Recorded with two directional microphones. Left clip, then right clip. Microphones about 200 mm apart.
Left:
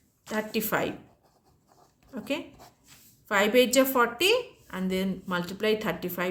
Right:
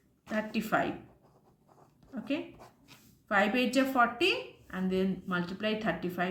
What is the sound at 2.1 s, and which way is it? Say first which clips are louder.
A woman's voice: left 3 dB; 45° left (ahead or behind).